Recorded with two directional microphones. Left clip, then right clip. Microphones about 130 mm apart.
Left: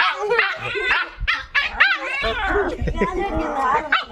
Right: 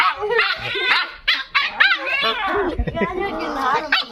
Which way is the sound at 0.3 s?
15° left (ahead or behind).